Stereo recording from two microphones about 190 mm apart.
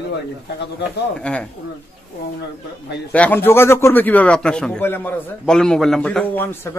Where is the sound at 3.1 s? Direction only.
10° left (ahead or behind).